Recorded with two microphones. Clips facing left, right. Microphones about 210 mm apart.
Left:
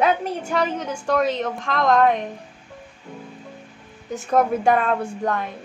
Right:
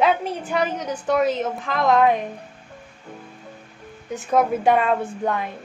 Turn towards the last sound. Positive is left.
turn(degrees=0)  # may be behind; listen again after turning